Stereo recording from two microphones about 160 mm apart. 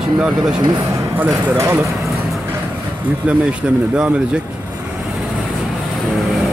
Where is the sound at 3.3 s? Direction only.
5° right (ahead or behind).